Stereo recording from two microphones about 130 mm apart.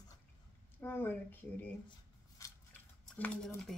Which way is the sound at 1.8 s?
25° left (ahead or behind).